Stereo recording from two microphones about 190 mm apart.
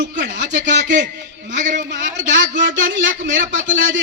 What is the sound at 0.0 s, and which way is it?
Speech, 45° right (ahead or behind).